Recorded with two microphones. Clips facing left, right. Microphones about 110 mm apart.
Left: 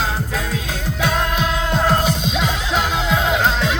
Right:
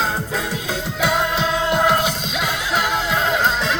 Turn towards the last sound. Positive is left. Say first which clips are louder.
# left 1 dB
turn(degrees=0)  # may be behind; listen again after turning